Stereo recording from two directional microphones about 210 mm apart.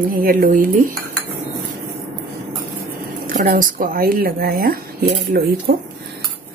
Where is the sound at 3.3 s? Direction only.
40° right (ahead or behind).